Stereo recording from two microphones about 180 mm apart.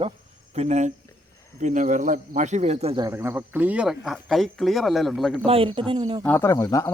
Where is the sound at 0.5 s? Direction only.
40° right (ahead or behind).